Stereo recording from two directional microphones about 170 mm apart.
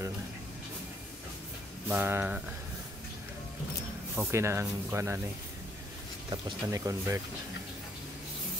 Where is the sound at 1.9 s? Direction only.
10° right (ahead or behind).